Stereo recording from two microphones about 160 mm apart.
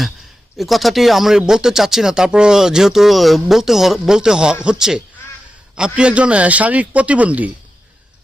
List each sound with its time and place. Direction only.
0.5 s a man's voice: centre (ahead or behind)